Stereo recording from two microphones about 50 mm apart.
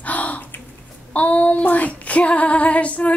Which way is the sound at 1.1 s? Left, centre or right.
Left.